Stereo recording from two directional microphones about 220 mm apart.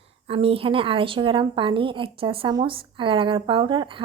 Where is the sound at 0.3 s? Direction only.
25° right (ahead or behind).